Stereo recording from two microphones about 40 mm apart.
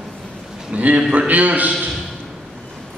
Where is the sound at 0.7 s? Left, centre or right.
Right.